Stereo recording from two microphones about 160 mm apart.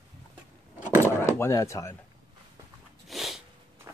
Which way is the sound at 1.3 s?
15° left (ahead or behind).